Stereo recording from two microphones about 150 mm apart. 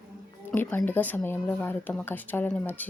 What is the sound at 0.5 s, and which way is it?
A woman's voice, 15° left (ahead or behind).